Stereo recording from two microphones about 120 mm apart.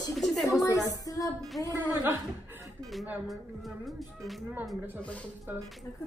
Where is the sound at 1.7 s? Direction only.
25° right (ahead or behind).